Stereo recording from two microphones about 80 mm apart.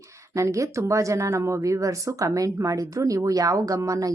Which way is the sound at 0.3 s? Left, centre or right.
Right.